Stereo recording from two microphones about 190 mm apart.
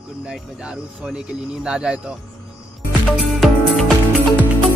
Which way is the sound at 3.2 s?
Centre (ahead or behind).